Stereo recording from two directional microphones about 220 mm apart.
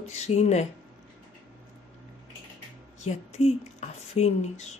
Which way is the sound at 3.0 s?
30° left (ahead or behind).